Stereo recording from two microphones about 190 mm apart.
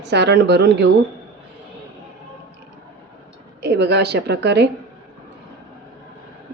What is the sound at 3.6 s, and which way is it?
A woman's voice, 60° right (ahead or behind).